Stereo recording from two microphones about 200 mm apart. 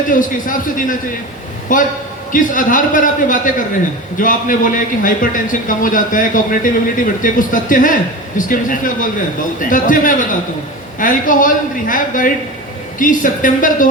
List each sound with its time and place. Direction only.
0.1 s a man's voice: 40° left (ahead or behind)